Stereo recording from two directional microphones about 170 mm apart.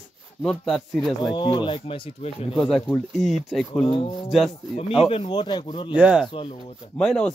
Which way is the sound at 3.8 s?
35° left (ahead or behind).